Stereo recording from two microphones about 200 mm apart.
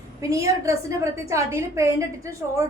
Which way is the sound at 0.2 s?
15° right (ahead or behind).